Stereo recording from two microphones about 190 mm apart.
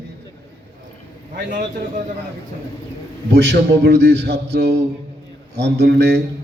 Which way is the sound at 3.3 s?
60° right (ahead or behind).